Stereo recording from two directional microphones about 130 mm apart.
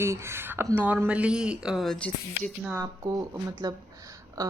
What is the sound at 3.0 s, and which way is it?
Speech, 30° right (ahead or behind).